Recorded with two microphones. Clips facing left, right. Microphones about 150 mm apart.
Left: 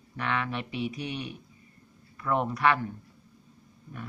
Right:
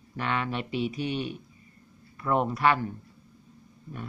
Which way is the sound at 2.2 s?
25° right (ahead or behind).